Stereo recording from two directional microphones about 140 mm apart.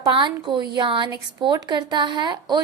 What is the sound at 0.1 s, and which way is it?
A woman's voice, 30° right (ahead or behind).